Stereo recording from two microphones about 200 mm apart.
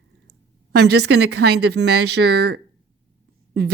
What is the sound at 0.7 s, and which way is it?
Speech, 55° right (ahead or behind).